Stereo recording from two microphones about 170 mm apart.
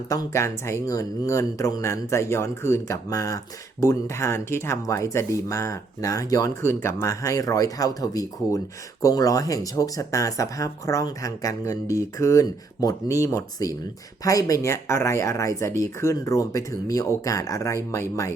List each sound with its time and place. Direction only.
0.1 s speech: 20° left (ahead or behind)